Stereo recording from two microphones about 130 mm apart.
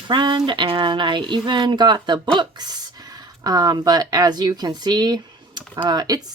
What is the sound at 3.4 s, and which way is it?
Speech, 30° right (ahead or behind).